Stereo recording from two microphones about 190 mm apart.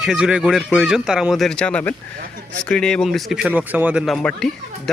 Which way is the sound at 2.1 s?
45° right (ahead or behind).